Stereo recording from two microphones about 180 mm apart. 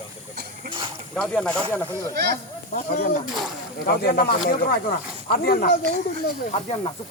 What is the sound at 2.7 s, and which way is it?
Speech, 55° left (ahead or behind).